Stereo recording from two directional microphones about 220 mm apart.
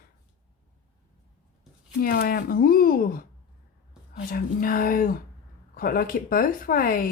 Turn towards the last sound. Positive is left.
turn(degrees=40)  # may be behind; listen again after turning